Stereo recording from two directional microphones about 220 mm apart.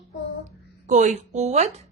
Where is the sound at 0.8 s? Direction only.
35° right (ahead or behind).